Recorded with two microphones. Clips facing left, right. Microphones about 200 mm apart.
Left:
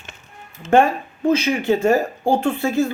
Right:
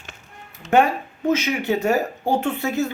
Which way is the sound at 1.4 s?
15° right (ahead or behind).